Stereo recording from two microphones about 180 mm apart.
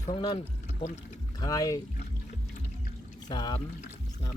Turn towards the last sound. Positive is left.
turn(degrees=20)  # may be behind; listen again after turning